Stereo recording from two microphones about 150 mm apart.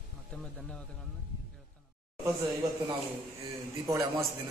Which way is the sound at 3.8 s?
20° right (ahead or behind).